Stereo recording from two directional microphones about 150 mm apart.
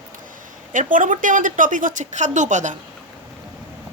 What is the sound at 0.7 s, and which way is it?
A woman's voice, 60° right (ahead or behind).